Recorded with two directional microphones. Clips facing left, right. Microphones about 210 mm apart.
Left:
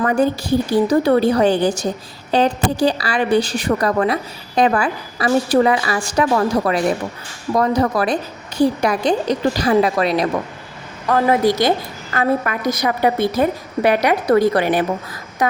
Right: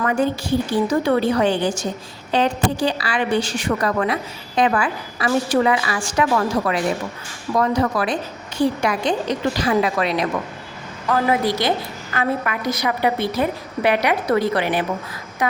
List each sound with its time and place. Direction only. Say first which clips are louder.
0.0 s a woman's voice: left 3 dB; 40° left (ahead or behind)